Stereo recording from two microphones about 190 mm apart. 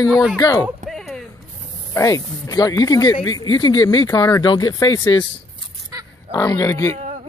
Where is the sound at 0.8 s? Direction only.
Centre (ahead or behind).